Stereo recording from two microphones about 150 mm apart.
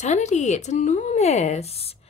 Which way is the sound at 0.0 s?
50° left (ahead or behind).